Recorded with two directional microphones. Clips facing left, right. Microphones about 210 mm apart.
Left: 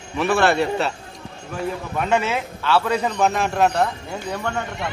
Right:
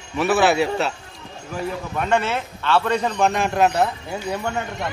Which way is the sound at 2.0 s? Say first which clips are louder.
Even; 5° left (ahead or behind).